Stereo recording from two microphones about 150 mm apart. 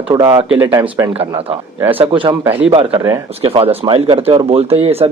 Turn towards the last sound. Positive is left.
turn(degrees=-40)  # may be behind; listen again after turning